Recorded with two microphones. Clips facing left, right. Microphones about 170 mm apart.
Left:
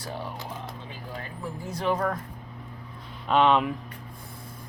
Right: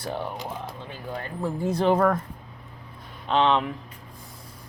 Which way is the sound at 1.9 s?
60° right (ahead or behind).